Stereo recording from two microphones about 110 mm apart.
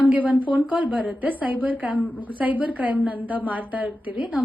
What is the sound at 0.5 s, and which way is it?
A woman's voice, 10° right (ahead or behind).